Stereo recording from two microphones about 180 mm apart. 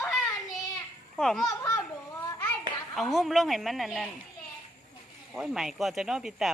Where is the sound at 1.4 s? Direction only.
20° left (ahead or behind).